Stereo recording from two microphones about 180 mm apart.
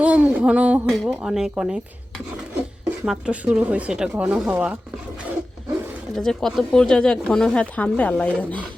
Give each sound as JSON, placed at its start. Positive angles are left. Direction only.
{"t": 0.0, "sound": "speech", "side_deg": -5}
{"t": 6.1, "sound": "speech", "side_deg": 0}